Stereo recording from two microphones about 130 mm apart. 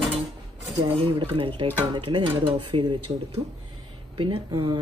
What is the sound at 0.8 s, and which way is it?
Speech, 40° right (ahead or behind).